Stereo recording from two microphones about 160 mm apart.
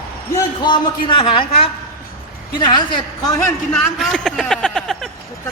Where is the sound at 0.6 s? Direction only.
30° left (ahead or behind).